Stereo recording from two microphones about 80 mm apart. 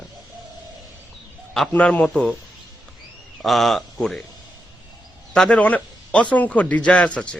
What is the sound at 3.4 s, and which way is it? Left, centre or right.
Speech, centre.